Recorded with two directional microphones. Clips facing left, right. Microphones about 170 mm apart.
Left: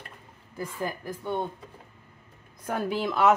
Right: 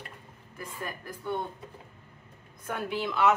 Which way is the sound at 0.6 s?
25° left (ahead or behind).